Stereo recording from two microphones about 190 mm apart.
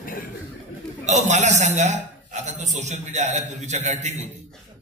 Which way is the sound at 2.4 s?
40° right (ahead or behind).